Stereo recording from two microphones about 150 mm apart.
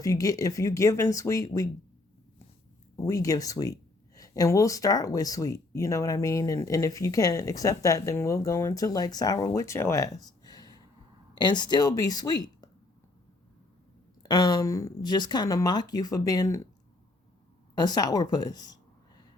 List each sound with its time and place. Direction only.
0.0 s speech: 25° left (ahead or behind)
2.9 s speech: 20° left (ahead or behind)
14.2 s speech: 30° left (ahead or behind)
17.7 s a woman's voice: 25° left (ahead or behind)